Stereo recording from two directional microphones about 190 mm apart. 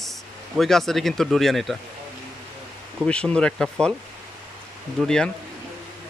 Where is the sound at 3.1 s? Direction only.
5° left (ahead or behind).